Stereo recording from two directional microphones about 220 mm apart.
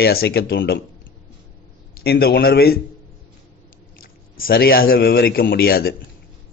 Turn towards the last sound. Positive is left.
turn(degrees=45)  # may be behind; listen again after turning